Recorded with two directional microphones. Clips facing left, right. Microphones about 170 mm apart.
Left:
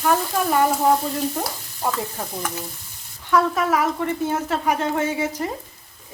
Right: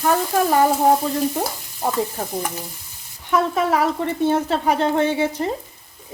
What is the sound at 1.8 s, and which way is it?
Speech, 20° right (ahead or behind).